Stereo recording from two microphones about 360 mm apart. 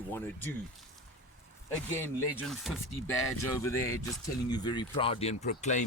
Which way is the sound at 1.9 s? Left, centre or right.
Centre.